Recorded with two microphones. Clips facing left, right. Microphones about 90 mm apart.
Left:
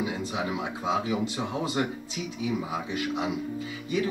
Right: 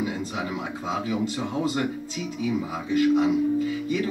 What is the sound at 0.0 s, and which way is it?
Speech, 20° left (ahead or behind).